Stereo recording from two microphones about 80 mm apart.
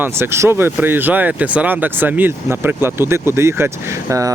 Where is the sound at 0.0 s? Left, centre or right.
Right.